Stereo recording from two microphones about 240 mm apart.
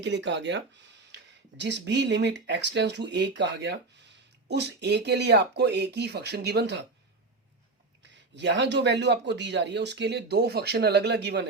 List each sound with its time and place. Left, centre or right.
0.0 s speech: right
8.0 s speech: right